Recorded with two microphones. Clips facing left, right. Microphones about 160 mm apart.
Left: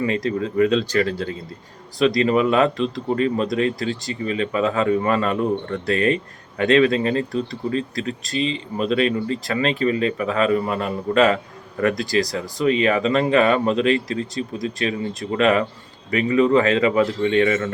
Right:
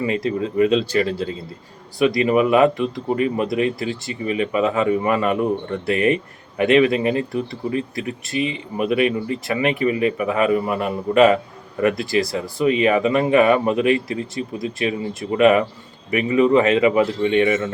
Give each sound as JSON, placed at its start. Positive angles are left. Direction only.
{"t": 0.0, "sound": "speech", "side_deg": -20}